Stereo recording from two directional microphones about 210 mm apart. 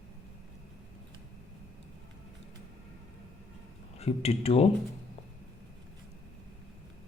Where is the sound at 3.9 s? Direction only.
30° left (ahead or behind).